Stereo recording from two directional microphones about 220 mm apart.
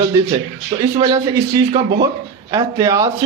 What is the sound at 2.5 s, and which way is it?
Speech, 20° right (ahead or behind).